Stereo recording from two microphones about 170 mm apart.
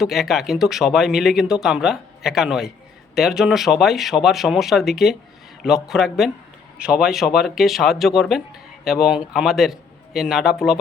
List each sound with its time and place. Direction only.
0.0 s a man's voice: centre (ahead or behind)